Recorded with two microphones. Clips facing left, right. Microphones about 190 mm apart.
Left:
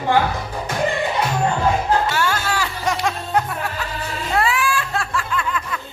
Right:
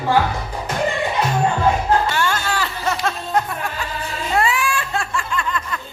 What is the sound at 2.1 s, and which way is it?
Music, 10° left (ahead or behind).